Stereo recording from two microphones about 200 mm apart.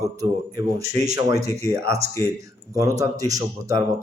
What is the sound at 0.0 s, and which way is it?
Speech, 15° right (ahead or behind).